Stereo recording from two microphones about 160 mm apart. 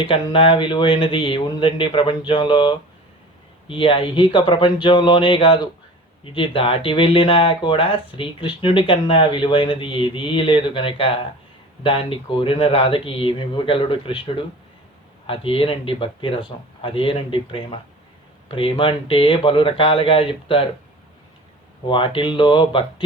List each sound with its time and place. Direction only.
0.0 s speech: 30° left (ahead or behind)
21.8 s speech: 30° left (ahead or behind)